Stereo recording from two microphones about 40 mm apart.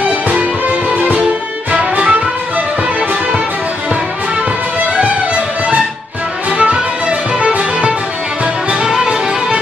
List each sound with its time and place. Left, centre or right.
0.3 s music: right
4.9 s music: right
8.8 s music: centre